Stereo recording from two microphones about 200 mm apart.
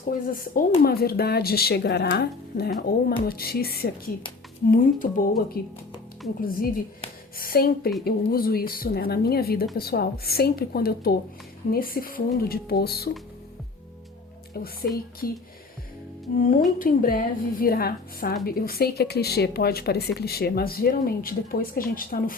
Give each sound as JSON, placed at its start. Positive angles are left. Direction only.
{"t": 0.0, "sound": "a woman's voice", "side_deg": 45}
{"t": 14.8, "sound": "a woman's voice", "side_deg": 50}